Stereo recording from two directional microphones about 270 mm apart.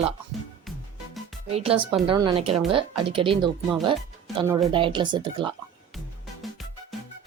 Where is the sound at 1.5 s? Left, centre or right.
Right.